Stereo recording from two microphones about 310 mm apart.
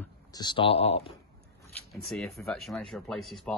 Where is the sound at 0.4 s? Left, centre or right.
Centre.